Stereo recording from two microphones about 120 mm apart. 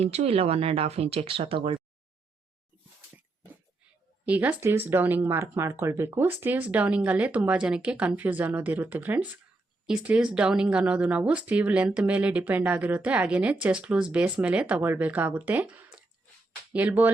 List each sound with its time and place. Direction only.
0.0 s speech: 60° right (ahead or behind)
4.3 s speech: 15° right (ahead or behind)